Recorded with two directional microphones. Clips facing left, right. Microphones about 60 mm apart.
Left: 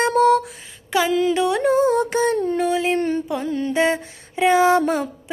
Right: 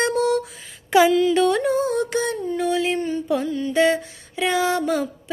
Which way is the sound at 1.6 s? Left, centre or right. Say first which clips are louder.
Left 4 dB; left.